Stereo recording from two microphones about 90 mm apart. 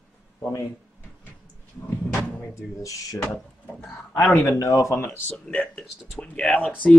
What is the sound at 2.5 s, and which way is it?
Speech, 40° left (ahead or behind).